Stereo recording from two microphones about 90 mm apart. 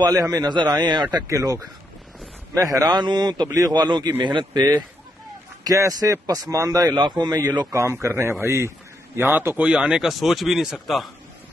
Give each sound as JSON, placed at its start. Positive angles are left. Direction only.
{"t": 0.0, "sound": "a man's voice", "side_deg": -45}
{"t": 0.6, "sound": "a man's voice", "side_deg": -55}
{"t": 1.2, "sound": "speech", "side_deg": -35}
{"t": 2.6, "sound": "a man's voice", "side_deg": -45}
{"t": 5.6, "sound": "a man's voice", "side_deg": -40}
{"t": 7.7, "sound": "a man's voice", "side_deg": -30}
{"t": 9.7, "sound": "a man's voice", "side_deg": -10}